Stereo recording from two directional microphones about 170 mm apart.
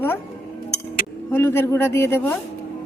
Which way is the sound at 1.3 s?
15° left (ahead or behind).